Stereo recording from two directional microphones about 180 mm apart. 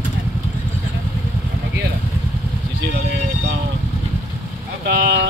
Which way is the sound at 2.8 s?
75° right (ahead or behind).